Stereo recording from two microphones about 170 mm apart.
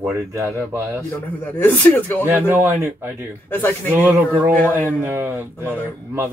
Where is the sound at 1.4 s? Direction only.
10° left (ahead or behind).